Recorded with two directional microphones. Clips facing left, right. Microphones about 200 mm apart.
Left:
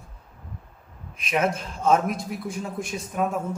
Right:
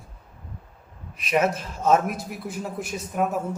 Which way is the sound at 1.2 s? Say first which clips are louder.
Right 2 dB; centre (ahead or behind).